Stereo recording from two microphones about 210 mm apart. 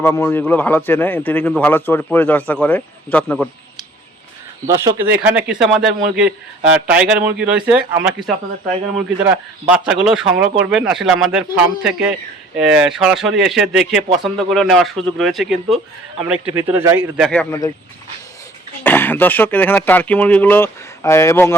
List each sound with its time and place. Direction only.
0.0 s a man's voice: 10° left (ahead or behind)
4.7 s a man's voice: 15° right (ahead or behind)
9.0 s a man's voice: 5° right (ahead or behind)
16.2 s a man's voice: 10° right (ahead or behind)
17.2 s a man's voice: 5° left (ahead or behind)
18.8 s a man's voice: 10° left (ahead or behind)